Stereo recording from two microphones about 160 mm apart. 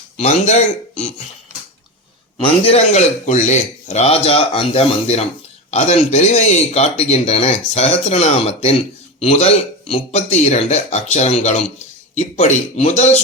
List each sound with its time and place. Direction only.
0.2 s speech: 45° left (ahead or behind)
2.4 s a man's voice: 40° left (ahead or behind)